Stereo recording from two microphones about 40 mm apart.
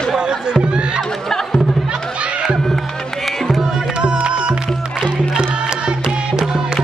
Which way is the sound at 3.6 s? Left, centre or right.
Right.